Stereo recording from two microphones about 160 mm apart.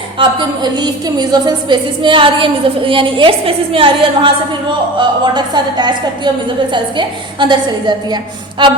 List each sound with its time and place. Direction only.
0.2 s a woman's voice: 25° right (ahead or behind)